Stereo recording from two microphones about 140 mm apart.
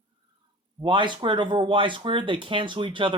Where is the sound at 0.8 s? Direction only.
35° right (ahead or behind).